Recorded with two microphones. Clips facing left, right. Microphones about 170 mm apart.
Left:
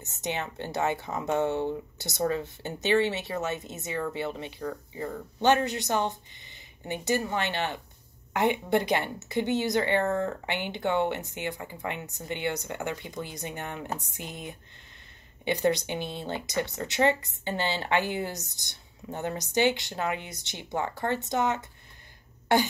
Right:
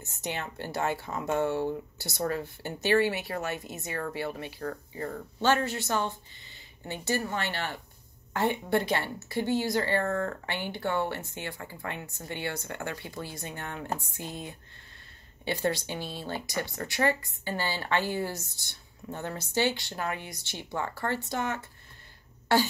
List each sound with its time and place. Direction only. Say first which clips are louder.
0.0 s speech: left 3 dB; 20° left (ahead or behind)